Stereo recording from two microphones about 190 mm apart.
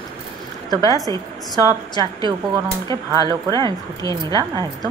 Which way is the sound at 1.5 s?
20° left (ahead or behind).